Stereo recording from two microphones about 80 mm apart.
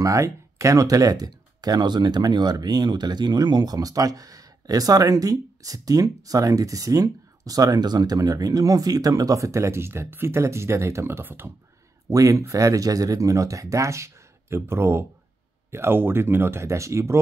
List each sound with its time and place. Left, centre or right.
0.0 s speech: right
12.1 s speech: right